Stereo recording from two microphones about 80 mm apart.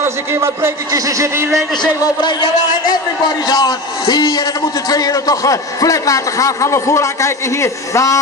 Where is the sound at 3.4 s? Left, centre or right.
Left.